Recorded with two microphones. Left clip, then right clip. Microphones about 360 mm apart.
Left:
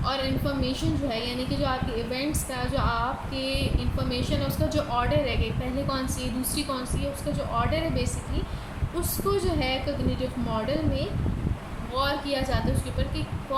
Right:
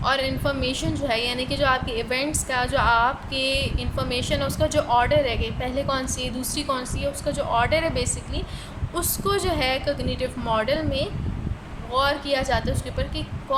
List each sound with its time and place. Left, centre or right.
0.0 s speech: centre